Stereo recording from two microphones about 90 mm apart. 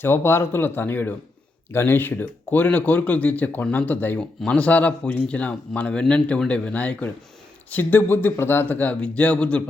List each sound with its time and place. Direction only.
0.0 s speech: 25° left (ahead or behind)